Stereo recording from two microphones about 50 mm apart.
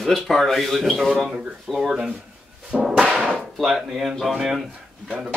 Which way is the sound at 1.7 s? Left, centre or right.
Centre.